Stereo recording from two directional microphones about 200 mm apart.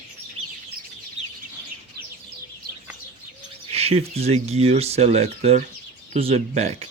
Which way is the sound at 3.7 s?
30° right (ahead or behind).